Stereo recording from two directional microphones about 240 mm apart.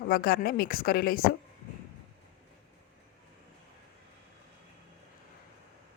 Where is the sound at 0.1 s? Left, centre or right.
Left.